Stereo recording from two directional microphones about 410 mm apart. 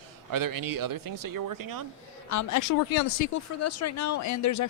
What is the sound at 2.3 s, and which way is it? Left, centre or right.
Speech, left.